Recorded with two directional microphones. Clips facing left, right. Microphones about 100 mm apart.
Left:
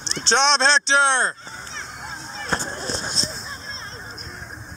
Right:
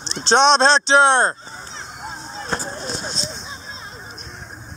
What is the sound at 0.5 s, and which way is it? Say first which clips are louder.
Speech: right 4 dB; 45° right (ahead or behind).